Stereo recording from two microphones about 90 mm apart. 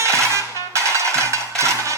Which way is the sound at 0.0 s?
30° right (ahead or behind).